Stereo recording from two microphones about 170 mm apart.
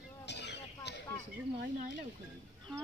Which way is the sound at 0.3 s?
90° left.